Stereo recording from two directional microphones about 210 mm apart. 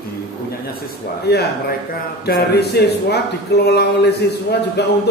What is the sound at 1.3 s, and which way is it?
Speech, 50° left (ahead or behind).